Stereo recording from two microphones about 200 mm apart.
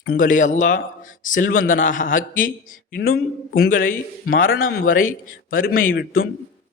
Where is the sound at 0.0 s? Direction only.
45° left (ahead or behind).